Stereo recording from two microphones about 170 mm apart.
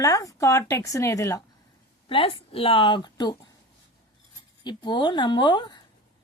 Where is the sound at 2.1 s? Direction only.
30° left (ahead or behind).